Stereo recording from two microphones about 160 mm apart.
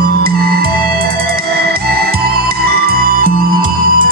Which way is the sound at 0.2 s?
75° right (ahead or behind).